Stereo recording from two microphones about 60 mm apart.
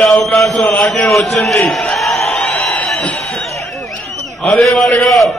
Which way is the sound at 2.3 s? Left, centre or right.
Left.